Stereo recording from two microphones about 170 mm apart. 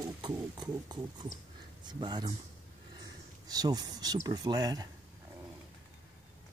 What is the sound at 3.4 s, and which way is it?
Speech, 25° right (ahead or behind).